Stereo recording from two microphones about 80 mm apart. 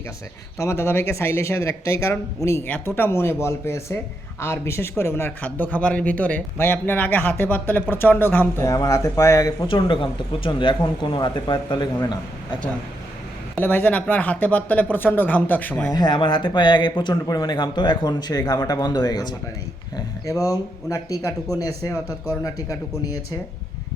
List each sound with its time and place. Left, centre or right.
0.6 s speech: left
2.6 s speech: left
8.6 s a man's voice: left
9.6 s speech: left
13.6 s speech: left
15.9 s speech: left
17.2 s a man's voice: left
20.2 s a man's voice: left